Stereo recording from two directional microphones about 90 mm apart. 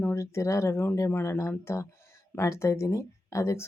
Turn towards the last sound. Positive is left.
turn(degrees=35)  # may be behind; listen again after turning